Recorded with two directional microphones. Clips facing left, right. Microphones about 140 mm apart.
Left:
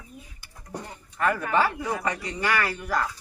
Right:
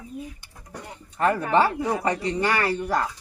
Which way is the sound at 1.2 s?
30° right (ahead or behind).